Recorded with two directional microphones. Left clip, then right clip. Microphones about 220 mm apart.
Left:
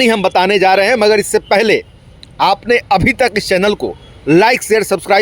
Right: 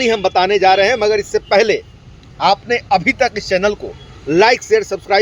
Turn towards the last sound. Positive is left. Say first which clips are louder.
# left 2 dB
turn(degrees=50)  # may be behind; listen again after turning